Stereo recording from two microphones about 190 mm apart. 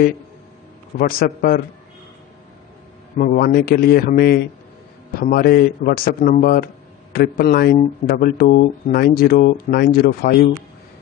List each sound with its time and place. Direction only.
0.9 s a man's voice: 50° left (ahead or behind)
3.2 s a man's voice: 50° left (ahead or behind)